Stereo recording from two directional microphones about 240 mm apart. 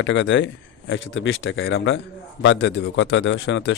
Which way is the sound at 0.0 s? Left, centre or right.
Left.